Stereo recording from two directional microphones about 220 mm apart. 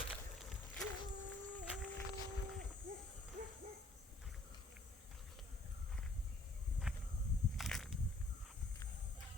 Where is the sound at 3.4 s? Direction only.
40° right (ahead or behind).